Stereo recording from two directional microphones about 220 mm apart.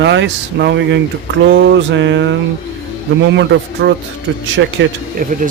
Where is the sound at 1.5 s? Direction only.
55° right (ahead or behind).